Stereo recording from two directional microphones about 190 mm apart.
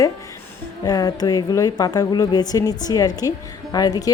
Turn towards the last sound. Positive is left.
turn(degrees=20)  # may be behind; listen again after turning